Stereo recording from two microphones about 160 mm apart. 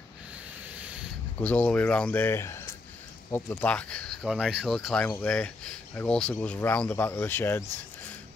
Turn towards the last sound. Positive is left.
turn(degrees=15)  # may be behind; listen again after turning